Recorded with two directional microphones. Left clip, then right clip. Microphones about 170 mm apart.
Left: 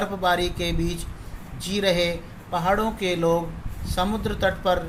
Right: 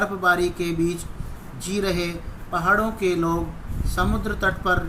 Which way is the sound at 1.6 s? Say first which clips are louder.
Left 3 dB; 50° left (ahead or behind).